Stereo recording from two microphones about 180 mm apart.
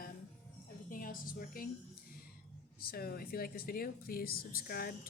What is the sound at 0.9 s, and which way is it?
Speech, 50° left (ahead or behind).